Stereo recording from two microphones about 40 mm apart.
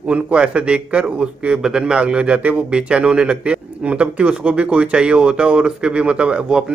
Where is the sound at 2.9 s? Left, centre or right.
Right.